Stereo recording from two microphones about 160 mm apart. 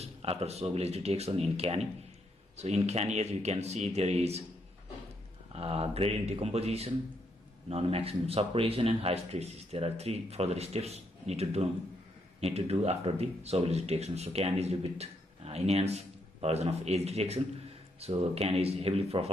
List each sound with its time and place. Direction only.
0.0 s speech: 40° right (ahead or behind)
5.5 s speech: 40° right (ahead or behind)